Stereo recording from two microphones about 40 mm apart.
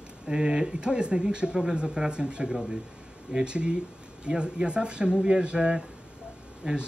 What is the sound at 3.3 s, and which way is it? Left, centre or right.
Speech, right.